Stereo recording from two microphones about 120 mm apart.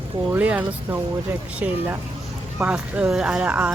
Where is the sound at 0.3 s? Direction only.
15° right (ahead or behind).